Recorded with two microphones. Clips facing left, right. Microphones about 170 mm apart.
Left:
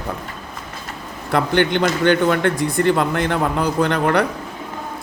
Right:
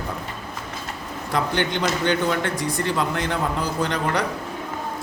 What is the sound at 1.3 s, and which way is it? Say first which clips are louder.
A man's voice: left 6 dB; 60° left (ahead or behind).